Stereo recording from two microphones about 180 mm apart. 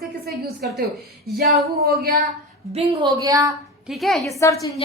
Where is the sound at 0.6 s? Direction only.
60° right (ahead or behind).